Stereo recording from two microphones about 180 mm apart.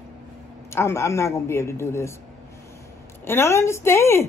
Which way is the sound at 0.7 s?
15° left (ahead or behind).